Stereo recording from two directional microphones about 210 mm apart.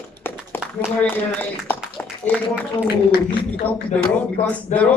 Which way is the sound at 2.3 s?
10° left (ahead or behind).